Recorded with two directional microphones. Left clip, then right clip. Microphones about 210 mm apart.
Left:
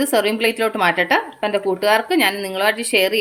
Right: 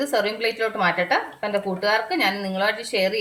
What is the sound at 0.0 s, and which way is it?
A woman's voice, 50° left (ahead or behind).